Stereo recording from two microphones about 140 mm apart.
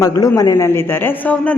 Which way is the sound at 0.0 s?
25° left (ahead or behind).